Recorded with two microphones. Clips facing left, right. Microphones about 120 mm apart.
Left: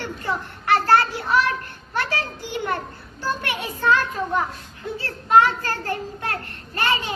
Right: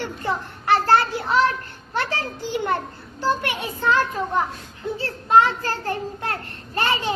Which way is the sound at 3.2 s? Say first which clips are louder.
Right 3 dB; 20° right (ahead or behind).